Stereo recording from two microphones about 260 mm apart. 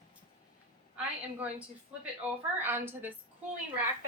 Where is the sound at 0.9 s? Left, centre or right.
Centre.